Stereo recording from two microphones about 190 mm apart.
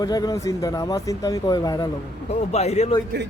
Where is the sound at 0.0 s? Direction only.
20° left (ahead or behind).